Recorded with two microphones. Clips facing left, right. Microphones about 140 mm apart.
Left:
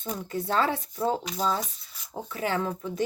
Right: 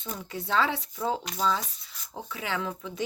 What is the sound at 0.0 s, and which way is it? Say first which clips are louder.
Speech: left 5 dB; 45° left (ahead or behind).